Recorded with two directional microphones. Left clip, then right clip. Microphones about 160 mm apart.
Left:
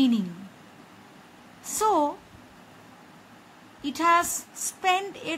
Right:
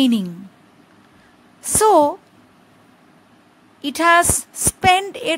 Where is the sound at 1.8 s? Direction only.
55° right (ahead or behind).